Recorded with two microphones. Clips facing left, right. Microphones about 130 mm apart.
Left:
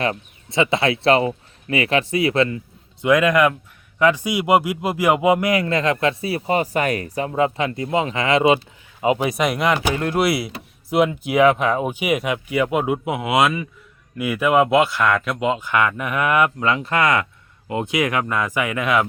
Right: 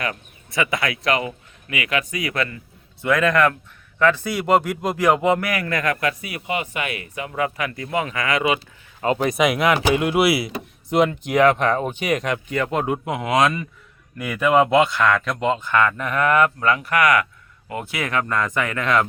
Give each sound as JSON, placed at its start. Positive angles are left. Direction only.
{"t": 0.0, "sound": "speech", "side_deg": 25}
{"t": 9.0, "sound": "speech", "side_deg": 10}